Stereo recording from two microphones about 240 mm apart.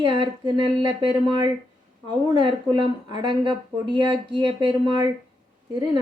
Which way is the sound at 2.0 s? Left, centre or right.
Centre.